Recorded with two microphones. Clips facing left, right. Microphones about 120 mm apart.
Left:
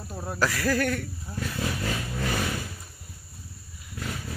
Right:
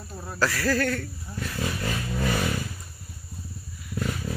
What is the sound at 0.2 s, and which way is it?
Speech, 15° left (ahead or behind).